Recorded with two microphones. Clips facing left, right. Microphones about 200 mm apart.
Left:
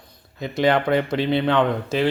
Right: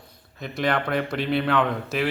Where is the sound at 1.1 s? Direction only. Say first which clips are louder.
Left 4 dB; 25° left (ahead or behind).